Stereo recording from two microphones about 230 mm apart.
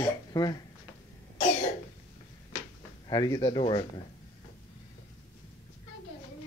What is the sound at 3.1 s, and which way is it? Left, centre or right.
Speech, centre.